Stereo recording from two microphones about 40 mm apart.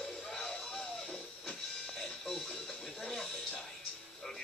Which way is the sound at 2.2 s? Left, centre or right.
Centre.